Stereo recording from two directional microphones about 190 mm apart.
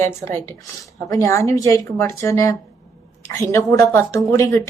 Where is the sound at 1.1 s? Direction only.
15° left (ahead or behind).